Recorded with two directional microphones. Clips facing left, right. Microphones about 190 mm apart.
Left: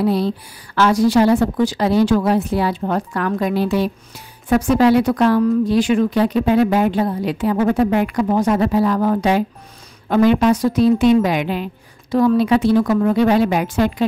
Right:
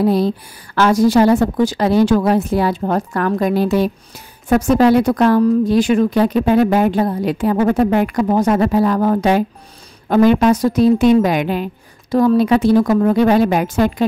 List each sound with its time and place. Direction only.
0.0 s a woman's voice: 45° right (ahead or behind)